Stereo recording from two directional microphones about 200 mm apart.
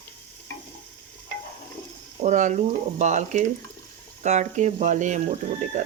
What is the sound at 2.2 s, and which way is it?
Speech, 40° right (ahead or behind).